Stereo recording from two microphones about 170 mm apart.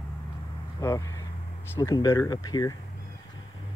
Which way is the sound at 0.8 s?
20° left (ahead or behind).